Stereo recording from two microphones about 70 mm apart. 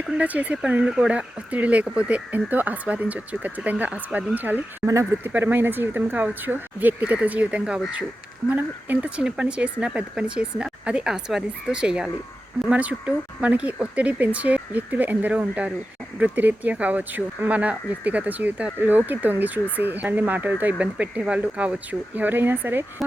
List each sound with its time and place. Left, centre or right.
0.2 s speech: right
4.8 s speech: centre
5.2 s speech: right